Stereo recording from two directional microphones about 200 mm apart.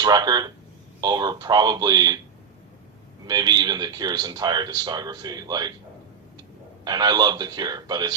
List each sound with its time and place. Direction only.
0.0 s a man's voice: 20° right (ahead or behind)
3.2 s a man's voice: 20° right (ahead or behind)
6.8 s a man's voice: 20° right (ahead or behind)